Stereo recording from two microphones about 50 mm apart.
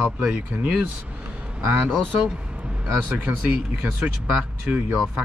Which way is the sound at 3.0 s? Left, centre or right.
Right.